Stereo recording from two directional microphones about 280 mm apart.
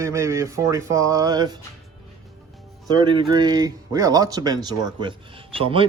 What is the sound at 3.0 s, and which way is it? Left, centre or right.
Speech, centre.